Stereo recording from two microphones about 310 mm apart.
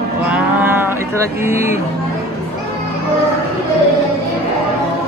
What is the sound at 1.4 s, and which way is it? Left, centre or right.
Music, centre.